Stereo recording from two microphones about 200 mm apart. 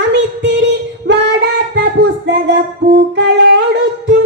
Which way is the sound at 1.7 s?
60° right (ahead or behind).